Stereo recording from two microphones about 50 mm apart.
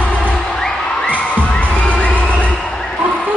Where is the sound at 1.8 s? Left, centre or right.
Left.